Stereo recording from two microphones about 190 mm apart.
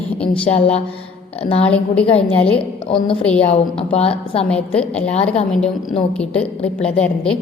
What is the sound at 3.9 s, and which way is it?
Speech, 30° left (ahead or behind).